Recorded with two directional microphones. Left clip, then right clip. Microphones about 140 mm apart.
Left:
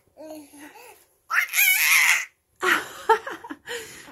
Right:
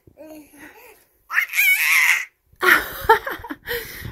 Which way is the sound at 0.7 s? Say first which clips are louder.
Even; 25° left (ahead or behind).